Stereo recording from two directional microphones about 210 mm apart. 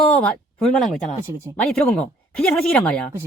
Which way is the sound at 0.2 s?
5° left (ahead or behind).